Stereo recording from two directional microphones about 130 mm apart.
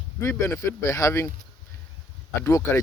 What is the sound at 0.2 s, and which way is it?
Speech, 25° left (ahead or behind).